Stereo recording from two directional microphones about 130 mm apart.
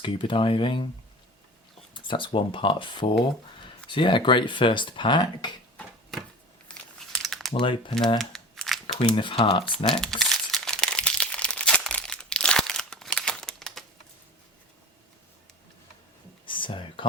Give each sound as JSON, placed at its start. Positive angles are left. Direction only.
{"t": 0.0, "sound": "speech", "side_deg": 40}
{"t": 1.9, "sound": "speech", "side_deg": 40}
{"t": 5.7, "sound": "a sound", "side_deg": 5}
{"t": 6.7, "sound": "crumpling", "side_deg": 5}
{"t": 7.6, "sound": "speech", "side_deg": 40}
{"t": 8.2, "sound": "crumpling", "side_deg": 0}
{"t": 9.0, "sound": "speech", "side_deg": 40}
{"t": 9.7, "sound": "crumpling", "side_deg": 5}
{"t": 16.5, "sound": "a sound", "side_deg": 40}